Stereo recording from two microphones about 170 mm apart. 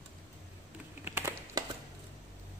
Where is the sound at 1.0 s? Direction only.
15° right (ahead or behind).